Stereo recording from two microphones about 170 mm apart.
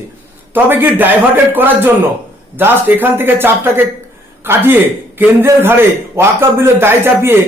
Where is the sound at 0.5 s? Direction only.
10° right (ahead or behind).